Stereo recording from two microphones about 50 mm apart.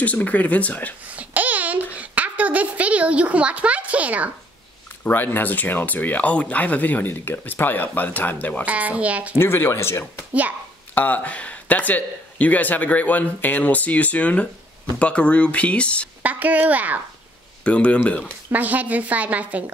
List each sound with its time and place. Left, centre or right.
0.0 s speech: left
1.1 s a sound: right
5.0 s speech: left
8.6 s speech: right
9.4 s speech: left
11.0 s speech: left
16.2 s speech: right
17.6 s speech: left
18.5 s speech: right